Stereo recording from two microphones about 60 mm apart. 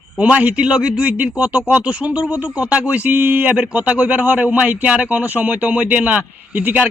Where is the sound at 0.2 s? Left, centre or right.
Right.